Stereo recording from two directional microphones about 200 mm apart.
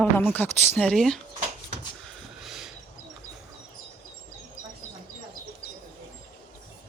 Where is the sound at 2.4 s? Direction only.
Centre (ahead or behind).